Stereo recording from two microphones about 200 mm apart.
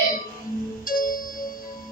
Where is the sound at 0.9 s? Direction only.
45° left (ahead or behind).